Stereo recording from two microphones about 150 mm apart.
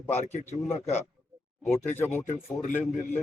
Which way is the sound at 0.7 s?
45° left (ahead or behind).